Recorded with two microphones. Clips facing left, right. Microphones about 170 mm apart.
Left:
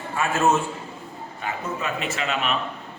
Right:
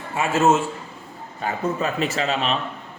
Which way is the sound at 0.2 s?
25° right (ahead or behind).